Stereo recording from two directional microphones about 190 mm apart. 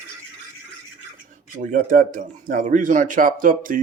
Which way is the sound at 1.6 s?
45° right (ahead or behind).